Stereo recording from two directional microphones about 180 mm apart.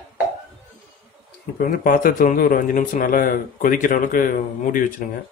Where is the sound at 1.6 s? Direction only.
50° left (ahead or behind).